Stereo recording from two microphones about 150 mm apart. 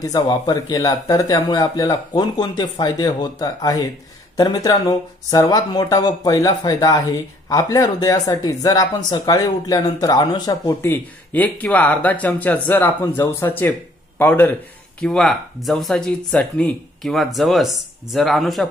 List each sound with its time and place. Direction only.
0.0 s speech: 25° left (ahead or behind)
10.7 s speech: 15° left (ahead or behind)
15.0 s speech: 5° left (ahead or behind)